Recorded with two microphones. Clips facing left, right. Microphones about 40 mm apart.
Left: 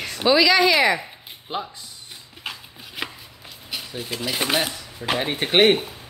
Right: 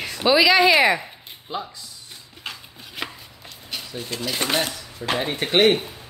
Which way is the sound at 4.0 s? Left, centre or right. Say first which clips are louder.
Left 1 dB; centre.